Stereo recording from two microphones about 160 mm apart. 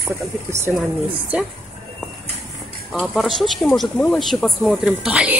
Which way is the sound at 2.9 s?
Centre (ahead or behind).